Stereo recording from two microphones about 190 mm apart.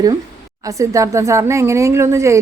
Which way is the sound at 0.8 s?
15° right (ahead or behind).